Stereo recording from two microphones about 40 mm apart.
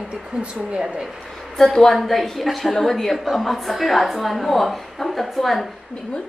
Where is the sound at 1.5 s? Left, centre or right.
Centre.